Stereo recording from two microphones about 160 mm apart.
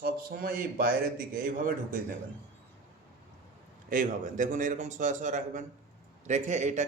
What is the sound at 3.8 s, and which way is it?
A man's voice, 55° right (ahead or behind).